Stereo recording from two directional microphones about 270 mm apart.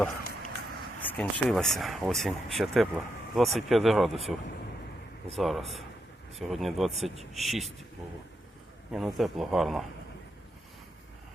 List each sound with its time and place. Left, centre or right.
1.0 s speech: centre
8.9 s speech: centre